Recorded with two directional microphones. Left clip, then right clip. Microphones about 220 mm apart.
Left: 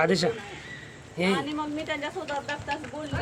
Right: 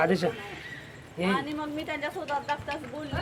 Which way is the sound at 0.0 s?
35° left (ahead or behind).